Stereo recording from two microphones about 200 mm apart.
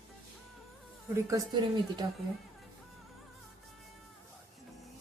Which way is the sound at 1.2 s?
15° right (ahead or behind).